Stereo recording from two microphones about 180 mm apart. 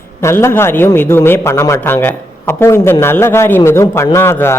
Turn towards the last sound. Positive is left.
turn(degrees=15)  # may be behind; listen again after turning